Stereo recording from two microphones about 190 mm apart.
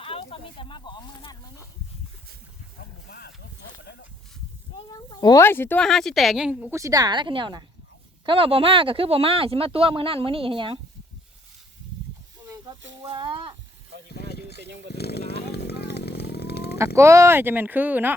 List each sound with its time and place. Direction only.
0.0 s speech: 30° left (ahead or behind)
3.1 s speech: 55° left (ahead or behind)
3.8 s speech: 70° left (ahead or behind)
4.8 s speech: 25° left (ahead or behind); by 10.8 s 25° right (ahead or behind)
13.0 s speech: 25° right (ahead or behind)
14.1 s a sound: 55° left (ahead or behind)
14.9 s chainsaw: 60° left (ahead or behind)
16.7 s speech: 15° right (ahead or behind)